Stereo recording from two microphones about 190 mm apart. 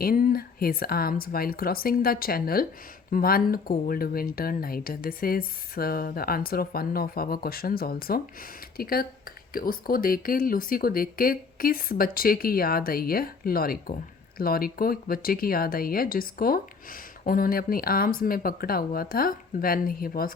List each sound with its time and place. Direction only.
0.0 s speech: 50° left (ahead or behind)